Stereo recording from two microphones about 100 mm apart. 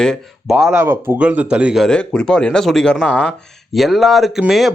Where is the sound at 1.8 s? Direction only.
5° left (ahead or behind).